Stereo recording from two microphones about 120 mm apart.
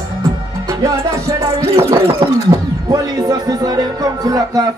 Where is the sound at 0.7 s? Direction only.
25° right (ahead or behind).